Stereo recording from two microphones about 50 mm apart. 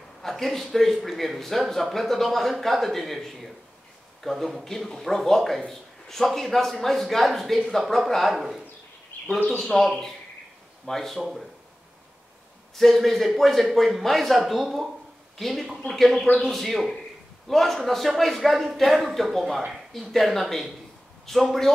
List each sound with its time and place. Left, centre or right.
0.2 s speech: centre
9.1 s bird: left
9.6 s speech: centre
12.7 s speech: centre